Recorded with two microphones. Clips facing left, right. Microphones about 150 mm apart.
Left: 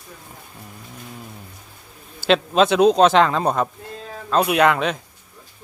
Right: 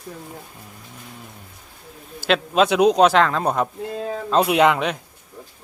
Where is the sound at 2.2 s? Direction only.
5° right (ahead or behind).